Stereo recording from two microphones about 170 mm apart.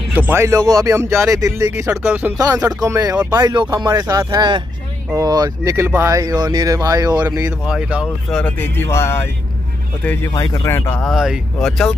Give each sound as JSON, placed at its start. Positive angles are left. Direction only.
{"t": 0.1, "sound": "speech", "side_deg": -10}
{"t": 2.3, "sound": "speech", "side_deg": -20}
{"t": 7.6, "sound": "speech", "side_deg": -5}
{"t": 8.4, "sound": "speech", "side_deg": 10}